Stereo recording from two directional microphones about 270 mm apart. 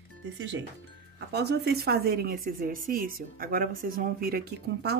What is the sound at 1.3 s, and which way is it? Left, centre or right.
A woman's voice, right.